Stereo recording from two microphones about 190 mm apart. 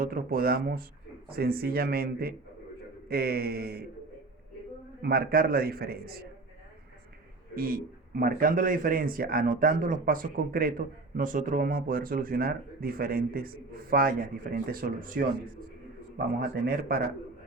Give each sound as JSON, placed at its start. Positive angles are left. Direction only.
{"t": 0.0, "sound": "a man's voice", "side_deg": -50}
{"t": 5.0, "sound": "a man's voice", "side_deg": -55}
{"t": 7.5, "sound": "a man's voice", "side_deg": -50}